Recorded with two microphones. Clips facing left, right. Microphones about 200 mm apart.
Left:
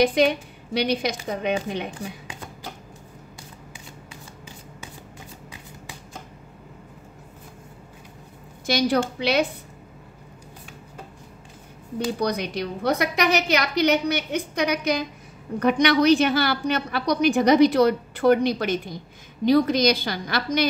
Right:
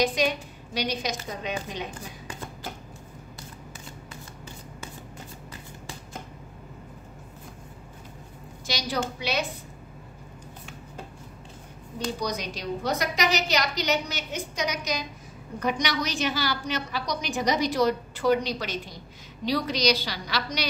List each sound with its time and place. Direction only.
0.0 s a woman's voice: 60° left (ahead or behind)
8.6 s a woman's voice: 55° left (ahead or behind)
12.2 s a woman's voice: 60° left (ahead or behind)